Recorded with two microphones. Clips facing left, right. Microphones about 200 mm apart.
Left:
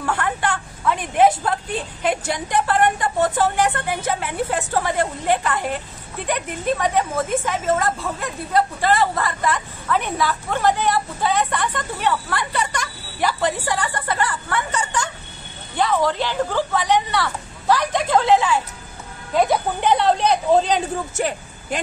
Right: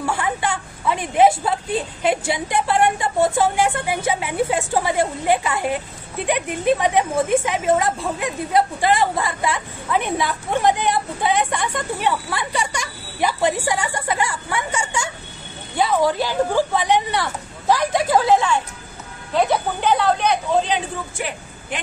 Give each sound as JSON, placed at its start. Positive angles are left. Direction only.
{"t": 0.0, "sound": "a woman's voice", "side_deg": -10}
{"t": 19.3, "sound": "speech", "side_deg": 10}
{"t": 19.9, "sound": "speech", "side_deg": 25}